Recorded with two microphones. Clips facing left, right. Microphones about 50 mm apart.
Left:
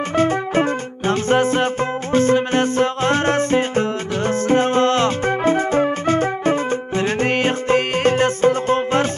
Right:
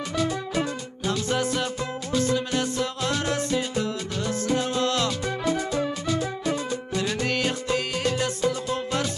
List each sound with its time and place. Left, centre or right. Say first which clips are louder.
0.1 s music: left 9 dB; left